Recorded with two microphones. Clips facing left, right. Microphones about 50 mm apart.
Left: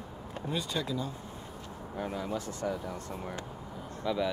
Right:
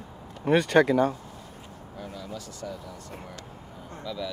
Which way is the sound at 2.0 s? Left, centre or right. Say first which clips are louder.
Left 4 dB; left.